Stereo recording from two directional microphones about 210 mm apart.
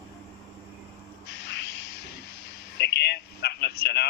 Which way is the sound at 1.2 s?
55° left (ahead or behind).